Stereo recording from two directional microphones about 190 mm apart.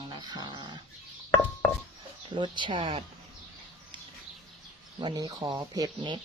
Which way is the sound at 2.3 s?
25° right (ahead or behind).